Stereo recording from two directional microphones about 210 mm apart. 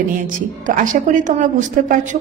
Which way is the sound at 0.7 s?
40° right (ahead or behind).